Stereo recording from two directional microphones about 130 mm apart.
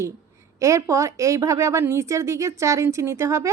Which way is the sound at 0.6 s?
25° right (ahead or behind).